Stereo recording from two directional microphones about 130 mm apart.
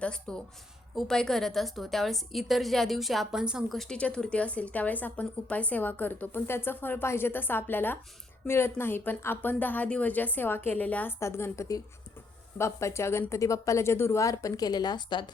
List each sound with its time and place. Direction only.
0.0 s a woman's voice: 5° left (ahead or behind); by 15.3 s 35° left (ahead or behind)